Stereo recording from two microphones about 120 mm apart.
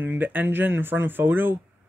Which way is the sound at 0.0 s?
15° right (ahead or behind).